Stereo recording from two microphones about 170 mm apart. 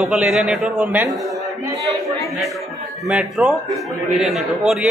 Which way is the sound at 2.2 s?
Centre (ahead or behind).